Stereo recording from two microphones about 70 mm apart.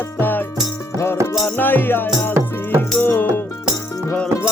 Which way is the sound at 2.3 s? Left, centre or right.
Right.